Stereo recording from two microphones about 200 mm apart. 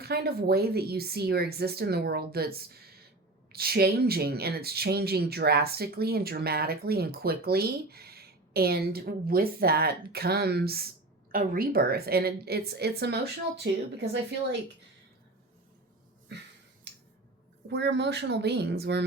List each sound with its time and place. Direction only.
0.0 s speech: 55° right (ahead or behind)
16.9 s a sound: 60° right (ahead or behind)
17.7 s speech: 60° right (ahead or behind)